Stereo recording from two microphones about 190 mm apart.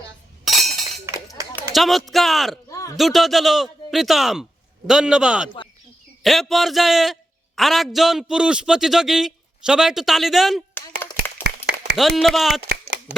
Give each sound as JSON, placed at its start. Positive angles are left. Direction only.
{"t": 0.4, "sound": "chink", "side_deg": 0}
{"t": 1.7, "sound": "a man's voice", "side_deg": 0}
{"t": 2.6, "sound": "a sound", "side_deg": 15}
{"t": 2.9, "sound": "a man's voice", "side_deg": 0}
{"t": 11.4, "sound": "a sound", "side_deg": -60}
{"t": 11.9, "sound": "a man's voice", "side_deg": 0}